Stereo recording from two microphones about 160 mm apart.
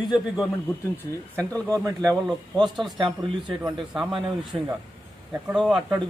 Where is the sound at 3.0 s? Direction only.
30° right (ahead or behind).